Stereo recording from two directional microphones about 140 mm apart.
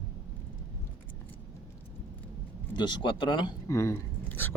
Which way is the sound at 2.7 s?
35° left (ahead or behind).